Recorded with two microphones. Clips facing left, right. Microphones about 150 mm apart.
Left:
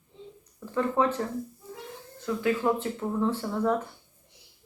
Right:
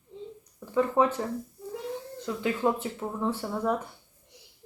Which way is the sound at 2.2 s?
20° right (ahead or behind).